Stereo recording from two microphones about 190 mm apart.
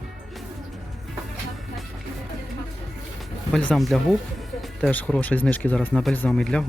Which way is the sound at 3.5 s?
5° left (ahead or behind).